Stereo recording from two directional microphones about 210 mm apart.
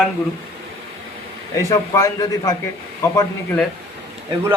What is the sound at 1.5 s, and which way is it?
A man's voice, 15° left (ahead or behind).